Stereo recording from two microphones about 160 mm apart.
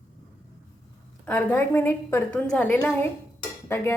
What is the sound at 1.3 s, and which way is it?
A woman's voice, 10° left (ahead or behind).